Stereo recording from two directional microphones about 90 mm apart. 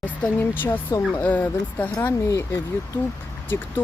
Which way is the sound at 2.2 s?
35° left (ahead or behind).